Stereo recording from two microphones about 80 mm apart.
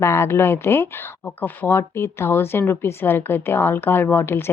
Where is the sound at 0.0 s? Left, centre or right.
Left.